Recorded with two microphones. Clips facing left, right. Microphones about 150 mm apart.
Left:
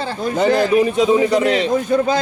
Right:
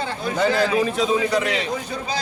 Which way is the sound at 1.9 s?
50° left (ahead or behind).